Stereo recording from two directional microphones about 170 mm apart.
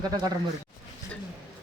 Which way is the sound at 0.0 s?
25° right (ahead or behind).